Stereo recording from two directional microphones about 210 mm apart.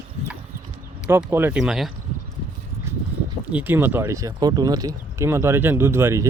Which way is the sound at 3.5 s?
10° right (ahead or behind).